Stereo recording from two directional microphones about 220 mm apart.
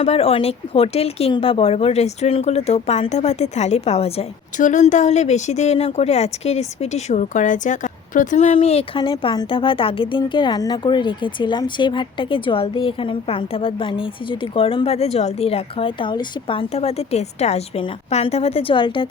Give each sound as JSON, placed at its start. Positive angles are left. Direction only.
{"t": 0.0, "sound": "speech", "side_deg": 25}